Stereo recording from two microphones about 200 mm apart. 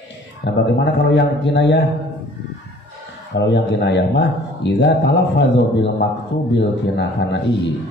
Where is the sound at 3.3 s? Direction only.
60° left (ahead or behind).